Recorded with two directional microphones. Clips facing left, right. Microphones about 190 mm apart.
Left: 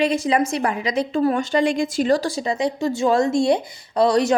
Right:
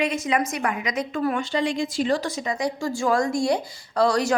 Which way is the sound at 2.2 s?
30° left (ahead or behind).